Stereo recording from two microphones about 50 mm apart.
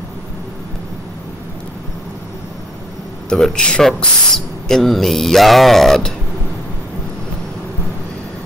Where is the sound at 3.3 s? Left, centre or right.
Centre.